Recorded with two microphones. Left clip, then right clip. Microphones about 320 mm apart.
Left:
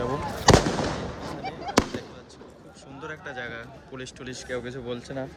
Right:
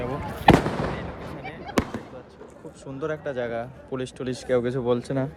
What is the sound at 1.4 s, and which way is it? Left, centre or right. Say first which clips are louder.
Fireworks: left 3 dB; left.